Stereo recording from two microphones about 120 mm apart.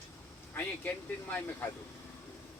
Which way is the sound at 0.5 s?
15° left (ahead or behind).